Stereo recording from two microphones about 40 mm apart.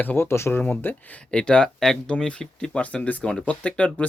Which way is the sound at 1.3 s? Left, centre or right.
Left.